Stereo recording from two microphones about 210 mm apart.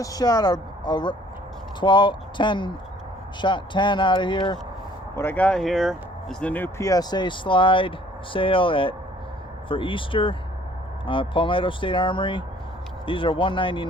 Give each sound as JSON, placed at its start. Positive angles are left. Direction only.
{"t": 0.0, "sound": "speech", "side_deg": 15}
{"t": 5.1, "sound": "speech", "side_deg": 10}